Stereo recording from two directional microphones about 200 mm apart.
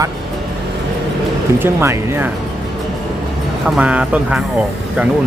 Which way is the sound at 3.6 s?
5° right (ahead or behind).